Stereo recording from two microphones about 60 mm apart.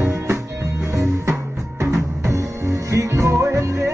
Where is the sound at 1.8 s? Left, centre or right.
Right.